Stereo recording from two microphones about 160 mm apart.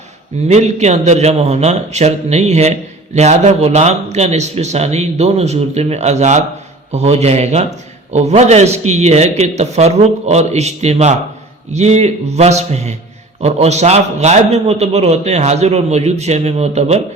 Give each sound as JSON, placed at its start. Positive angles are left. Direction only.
{"t": 0.4, "sound": "a man's voice", "side_deg": -45}